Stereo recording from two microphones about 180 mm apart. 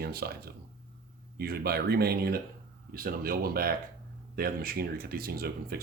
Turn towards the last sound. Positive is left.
turn(degrees=-55)  # may be behind; listen again after turning